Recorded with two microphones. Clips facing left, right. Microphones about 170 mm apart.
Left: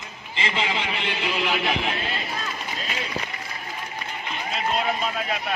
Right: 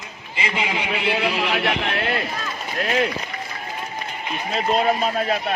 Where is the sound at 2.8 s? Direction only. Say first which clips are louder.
Right 15 dB; 65° right (ahead or behind).